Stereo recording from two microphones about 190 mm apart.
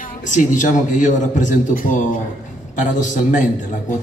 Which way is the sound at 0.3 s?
40° left (ahead or behind).